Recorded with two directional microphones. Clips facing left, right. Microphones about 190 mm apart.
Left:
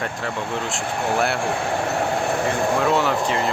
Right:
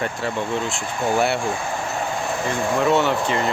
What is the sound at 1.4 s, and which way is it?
Vehicle, 65° left (ahead or behind).